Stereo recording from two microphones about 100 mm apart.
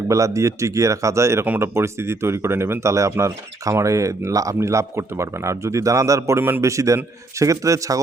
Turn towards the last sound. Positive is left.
turn(degrees=-35)  # may be behind; listen again after turning